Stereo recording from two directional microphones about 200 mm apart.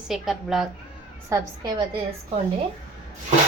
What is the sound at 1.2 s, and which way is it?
Speech, 15° right (ahead or behind).